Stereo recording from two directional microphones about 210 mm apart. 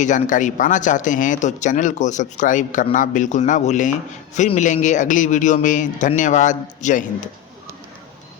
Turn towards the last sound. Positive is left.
turn(degrees=35)  # may be behind; listen again after turning